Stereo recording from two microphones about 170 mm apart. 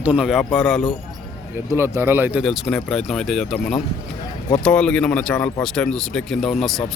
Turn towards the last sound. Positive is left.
turn(degrees=0)  # may be behind; listen again after turning